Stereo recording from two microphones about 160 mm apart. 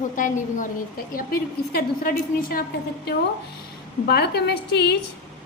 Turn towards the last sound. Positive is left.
turn(degrees=90)